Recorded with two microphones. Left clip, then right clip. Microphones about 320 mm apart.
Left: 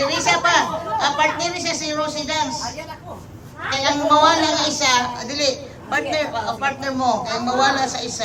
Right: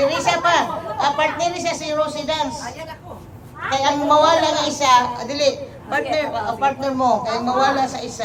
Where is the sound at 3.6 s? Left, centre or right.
Centre.